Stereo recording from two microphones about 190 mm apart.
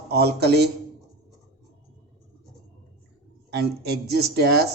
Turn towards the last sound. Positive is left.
turn(degrees=-60)  # may be behind; listen again after turning